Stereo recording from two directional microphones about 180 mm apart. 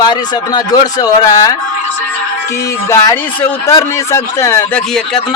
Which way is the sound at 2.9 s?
15° left (ahead or behind).